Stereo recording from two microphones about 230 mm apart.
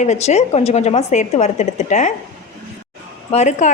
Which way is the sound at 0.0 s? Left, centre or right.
Left.